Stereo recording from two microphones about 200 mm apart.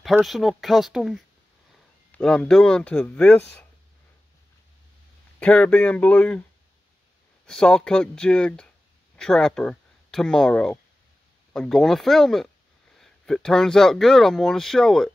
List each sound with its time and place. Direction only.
0.0 s speech: centre (ahead or behind)
5.4 s speech: 5° left (ahead or behind)
7.4 s speech: 5° left (ahead or behind)